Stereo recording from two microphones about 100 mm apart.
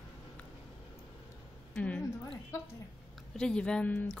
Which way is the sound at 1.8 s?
15° left (ahead or behind).